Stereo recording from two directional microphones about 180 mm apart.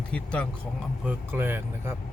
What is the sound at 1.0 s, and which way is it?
Speech, 10° right (ahead or behind).